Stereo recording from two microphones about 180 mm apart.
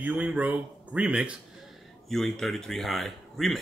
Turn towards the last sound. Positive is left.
turn(degrees=0)  # may be behind; listen again after turning